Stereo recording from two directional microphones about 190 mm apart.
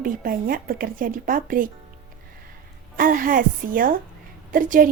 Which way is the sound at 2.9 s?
45° right (ahead or behind).